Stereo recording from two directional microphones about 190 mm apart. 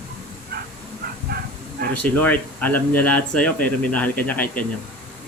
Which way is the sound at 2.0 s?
10° left (ahead or behind).